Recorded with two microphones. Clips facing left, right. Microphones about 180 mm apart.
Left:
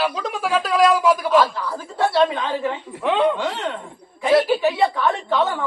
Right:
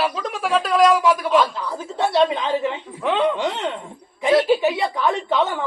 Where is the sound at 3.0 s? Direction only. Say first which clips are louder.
Left 1 dB; centre (ahead or behind).